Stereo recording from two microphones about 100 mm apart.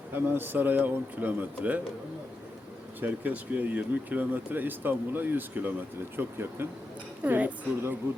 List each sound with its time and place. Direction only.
0.1 s speech: 20° right (ahead or behind)
3.0 s speech: 20° right (ahead or behind)